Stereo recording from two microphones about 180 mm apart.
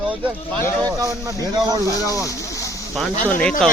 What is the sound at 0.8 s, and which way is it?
Speech, 20° right (ahead or behind).